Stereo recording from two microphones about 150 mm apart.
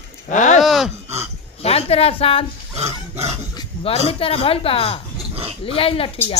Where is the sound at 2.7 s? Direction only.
45° right (ahead or behind).